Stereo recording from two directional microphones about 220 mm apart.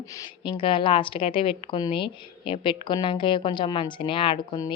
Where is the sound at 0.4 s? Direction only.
25° left (ahead or behind).